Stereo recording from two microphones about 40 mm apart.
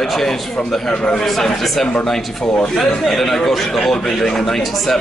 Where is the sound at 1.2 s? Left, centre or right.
Centre.